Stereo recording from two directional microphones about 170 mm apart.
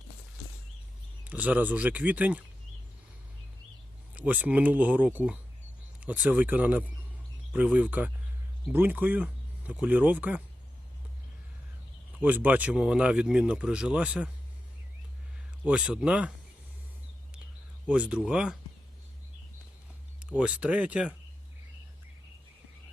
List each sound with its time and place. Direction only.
1.2 s speech: 10° right (ahead or behind)
4.1 s speech: 10° right (ahead or behind)
12.2 s speech: 10° right (ahead or behind)
15.6 s speech: 5° right (ahead or behind)
17.8 s speech: 5° right (ahead or behind)
20.3 s speech: 5° right (ahead or behind)